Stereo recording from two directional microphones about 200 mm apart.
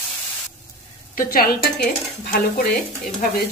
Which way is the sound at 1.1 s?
45° left (ahead or behind).